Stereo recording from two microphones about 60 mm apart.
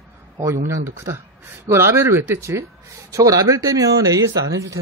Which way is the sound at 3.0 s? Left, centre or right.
Right.